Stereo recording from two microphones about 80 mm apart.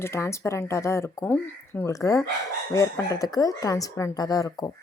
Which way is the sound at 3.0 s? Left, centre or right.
Left.